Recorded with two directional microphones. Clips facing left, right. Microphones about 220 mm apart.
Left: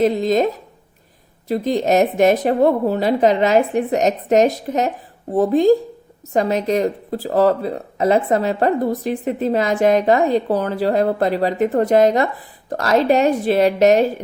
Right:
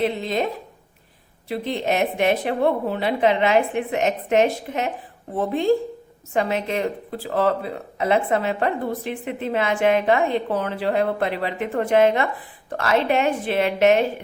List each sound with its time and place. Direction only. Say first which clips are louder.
0.0 s speech: left 7 dB; 40° left (ahead or behind)